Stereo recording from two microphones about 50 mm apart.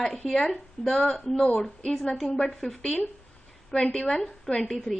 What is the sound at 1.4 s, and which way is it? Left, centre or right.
A woman's voice, centre.